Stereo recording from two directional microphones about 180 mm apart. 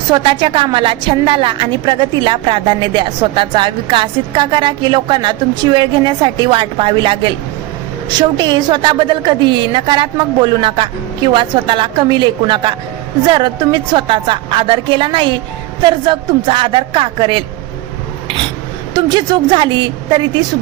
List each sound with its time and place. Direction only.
0.1 s a woman's voice: 25° right (ahead or behind)
18.9 s a woman's voice: 25° right (ahead or behind)